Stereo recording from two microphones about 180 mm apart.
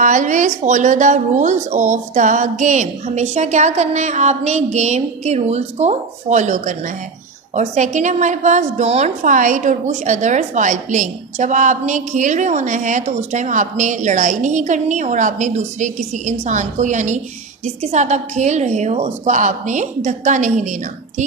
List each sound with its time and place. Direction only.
0.0 s a woman's voice: 45° right (ahead or behind)